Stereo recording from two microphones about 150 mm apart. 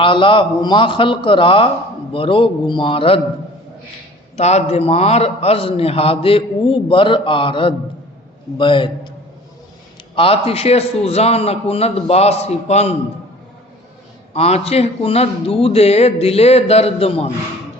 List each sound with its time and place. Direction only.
0.0 s a man's voice: 35° left (ahead or behind)
4.4 s a man's voice: 45° left (ahead or behind)
10.2 s a man's voice: 40° left (ahead or behind)
14.3 s a man's voice: 45° left (ahead or behind)